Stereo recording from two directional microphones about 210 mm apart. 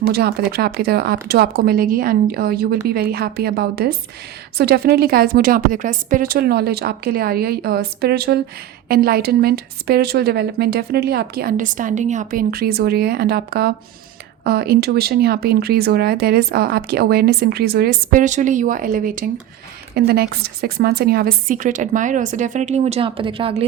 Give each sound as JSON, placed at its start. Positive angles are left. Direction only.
{"t": 0.1, "sound": "a woman's voice", "side_deg": -50}